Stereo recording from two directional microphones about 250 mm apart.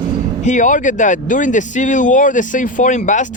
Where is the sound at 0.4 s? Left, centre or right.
Left.